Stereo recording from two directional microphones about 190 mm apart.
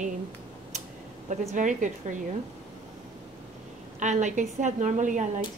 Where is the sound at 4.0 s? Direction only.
40° right (ahead or behind).